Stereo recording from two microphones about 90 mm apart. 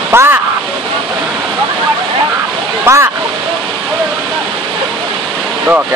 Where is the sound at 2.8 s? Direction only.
30° right (ahead or behind).